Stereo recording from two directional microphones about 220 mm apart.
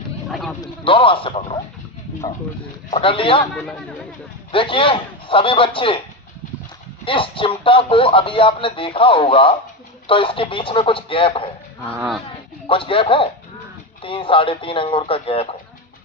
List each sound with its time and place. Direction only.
0.6 s speech: 25° left (ahead or behind)
2.9 s speech: 25° left (ahead or behind)
4.5 s speech: 25° left (ahead or behind)
7.0 s speech: 25° left (ahead or behind)
11.9 s speech: centre (ahead or behind)
12.6 s speech: 25° left (ahead or behind)